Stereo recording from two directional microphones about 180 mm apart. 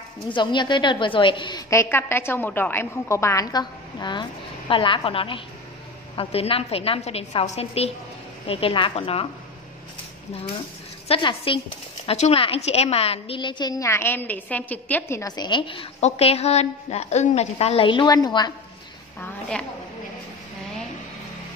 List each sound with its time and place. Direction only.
0.3 s a woman's voice: 25° left (ahead or behind)
11.1 s a woman's voice: 30° left (ahead or behind)